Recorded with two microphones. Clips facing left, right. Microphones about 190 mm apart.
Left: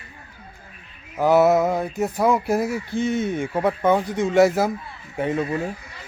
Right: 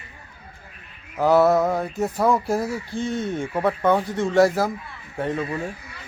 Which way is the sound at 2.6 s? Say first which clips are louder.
Left 3 dB; 20° left (ahead or behind).